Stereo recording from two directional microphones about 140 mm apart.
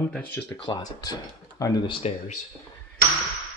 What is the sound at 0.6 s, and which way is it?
Speech, 30° left (ahead or behind).